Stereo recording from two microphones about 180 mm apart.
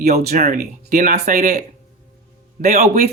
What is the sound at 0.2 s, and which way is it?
Speech, 60° right (ahead or behind).